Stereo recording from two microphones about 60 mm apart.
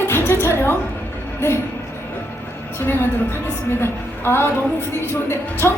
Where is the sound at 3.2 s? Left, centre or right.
Left.